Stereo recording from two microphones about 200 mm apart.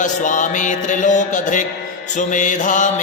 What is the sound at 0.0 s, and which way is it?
Music, 40° left (ahead or behind).